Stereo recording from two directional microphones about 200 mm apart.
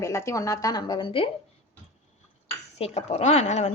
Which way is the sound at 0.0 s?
15° left (ahead or behind).